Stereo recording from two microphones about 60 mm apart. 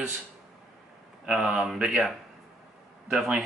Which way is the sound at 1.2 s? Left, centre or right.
Centre.